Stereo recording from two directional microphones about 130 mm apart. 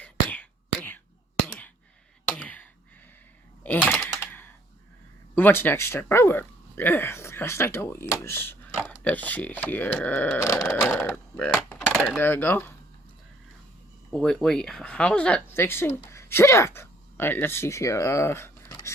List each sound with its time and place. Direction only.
0.0 s whispering: 10° left (ahead or behind)
2.2 s a sound: 10° left (ahead or behind)
3.6 s typing: 10° left (ahead or behind)
4.2 s a sound: 15° left (ahead or behind)
5.3 s speech: 15° left (ahead or behind)
14.1 s speech: 5° left (ahead or behind); by 18.9 s 20° left (ahead or behind)